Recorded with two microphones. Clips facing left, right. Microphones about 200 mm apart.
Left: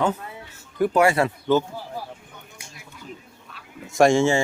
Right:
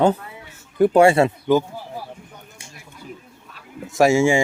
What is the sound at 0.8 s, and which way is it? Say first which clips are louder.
Speech: right 5 dB; 30° right (ahead or behind).